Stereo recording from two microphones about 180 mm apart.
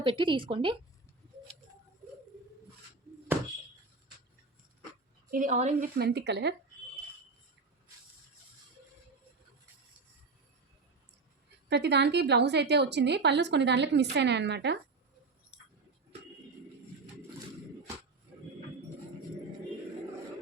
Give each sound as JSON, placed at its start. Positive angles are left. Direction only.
{"t": 0.0, "sound": "speech", "side_deg": -30}
{"t": 5.3, "sound": "a woman's voice", "side_deg": -45}
{"t": 6.0, "sound": "a woman's voice", "side_deg": -70}
{"t": 11.7, "sound": "a woman's voice", "side_deg": -70}
{"t": 15.5, "sound": "a sound", "side_deg": -5}